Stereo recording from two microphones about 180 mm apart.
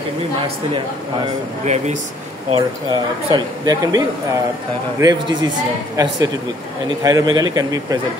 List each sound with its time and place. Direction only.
2.5 s speech: 25° right (ahead or behind)